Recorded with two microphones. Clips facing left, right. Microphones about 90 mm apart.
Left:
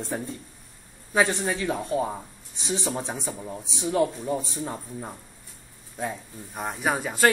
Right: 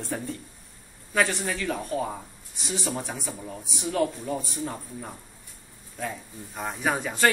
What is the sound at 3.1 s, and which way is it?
Speech, centre (ahead or behind).